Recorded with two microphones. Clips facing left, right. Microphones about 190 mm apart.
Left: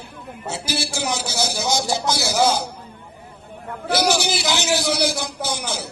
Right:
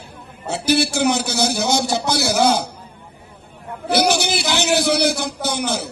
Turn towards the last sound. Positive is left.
turn(degrees=-60)  # may be behind; listen again after turning